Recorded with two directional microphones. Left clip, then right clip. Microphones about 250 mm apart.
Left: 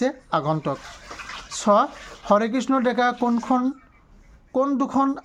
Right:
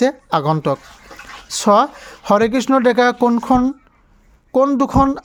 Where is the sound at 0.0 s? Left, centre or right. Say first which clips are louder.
Right 7 dB; right.